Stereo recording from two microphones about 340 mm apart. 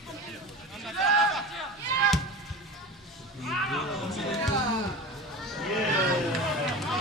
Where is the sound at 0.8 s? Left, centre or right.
Centre.